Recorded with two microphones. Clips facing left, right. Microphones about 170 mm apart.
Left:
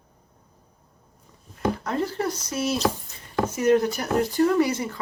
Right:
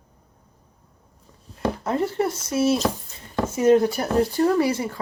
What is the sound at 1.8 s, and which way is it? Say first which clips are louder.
Speech: right 3 dB; 25° right (ahead or behind).